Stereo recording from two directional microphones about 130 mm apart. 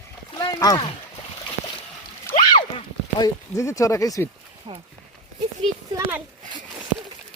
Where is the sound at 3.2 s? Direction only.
25° left (ahead or behind).